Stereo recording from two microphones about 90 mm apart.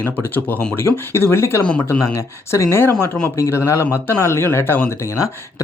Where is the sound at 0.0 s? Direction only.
20° left (ahead or behind).